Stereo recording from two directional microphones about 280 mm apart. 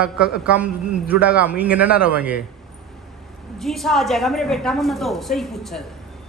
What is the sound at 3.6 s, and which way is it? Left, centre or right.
A woman's voice, centre.